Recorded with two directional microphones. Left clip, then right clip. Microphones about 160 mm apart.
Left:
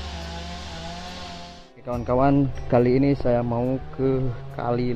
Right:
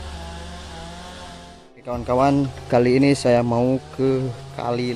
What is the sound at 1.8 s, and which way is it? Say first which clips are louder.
Speech: right 2 dB; 20° right (ahead or behind).